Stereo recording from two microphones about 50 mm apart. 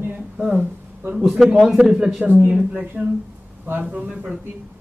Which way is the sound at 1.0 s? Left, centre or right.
Centre.